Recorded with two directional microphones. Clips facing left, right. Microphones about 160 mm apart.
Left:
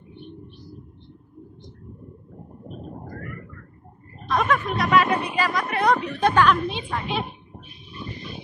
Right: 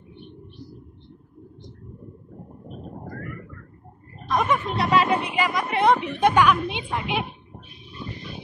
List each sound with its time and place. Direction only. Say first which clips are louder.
4.3 s speech: even; 20° right (ahead or behind)
4.7 s a woman's voice: even; 30° right (ahead or behind)